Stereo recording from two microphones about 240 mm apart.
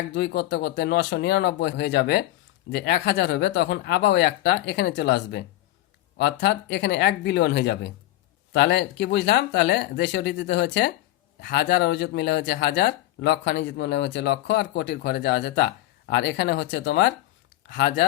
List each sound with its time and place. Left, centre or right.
0.1 s speech: left